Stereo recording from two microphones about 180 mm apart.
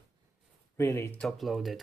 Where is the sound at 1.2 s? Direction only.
Centre (ahead or behind).